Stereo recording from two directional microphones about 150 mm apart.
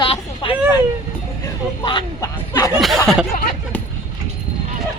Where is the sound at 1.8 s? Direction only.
30° left (ahead or behind).